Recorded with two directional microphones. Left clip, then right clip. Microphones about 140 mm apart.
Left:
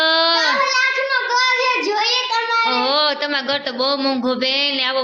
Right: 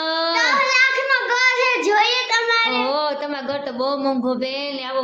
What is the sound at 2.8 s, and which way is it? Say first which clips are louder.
A woman's voice: left 4 dB; 5° right (ahead or behind).